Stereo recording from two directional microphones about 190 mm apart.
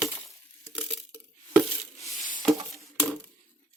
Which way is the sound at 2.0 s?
40° left (ahead or behind).